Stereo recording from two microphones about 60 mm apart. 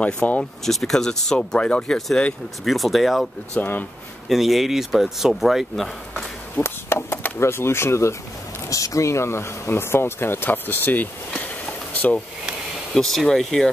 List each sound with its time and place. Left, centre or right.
0.0 s speech: left
0.4 s speech: centre
2.6 s speech: centre
3.6 s speech: left
4.3 s speech: centre
6.6 s speech: left
8.6 s speech: left
11.3 s a sound: left
12.9 s speech: centre